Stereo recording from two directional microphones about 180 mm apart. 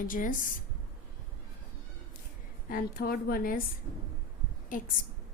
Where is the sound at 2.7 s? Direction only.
55° left (ahead or behind).